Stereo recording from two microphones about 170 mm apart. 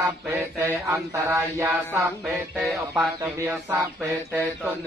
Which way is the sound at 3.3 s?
20° right (ahead or behind).